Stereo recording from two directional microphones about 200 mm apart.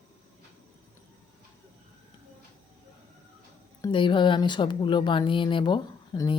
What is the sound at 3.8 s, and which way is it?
A woman's voice, 20° left (ahead or behind).